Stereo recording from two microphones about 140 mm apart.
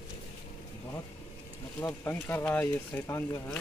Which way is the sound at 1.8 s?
15° left (ahead or behind).